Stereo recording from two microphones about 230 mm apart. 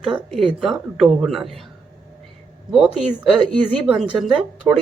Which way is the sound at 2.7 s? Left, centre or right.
Centre.